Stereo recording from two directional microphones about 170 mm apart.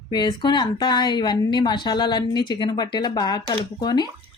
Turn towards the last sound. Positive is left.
turn(degrees=25)  # may be behind; listen again after turning